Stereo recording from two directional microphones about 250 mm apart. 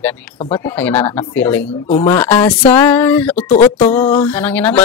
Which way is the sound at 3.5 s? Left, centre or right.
Left.